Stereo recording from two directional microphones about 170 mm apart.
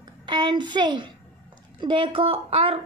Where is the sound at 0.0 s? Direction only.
25° right (ahead or behind).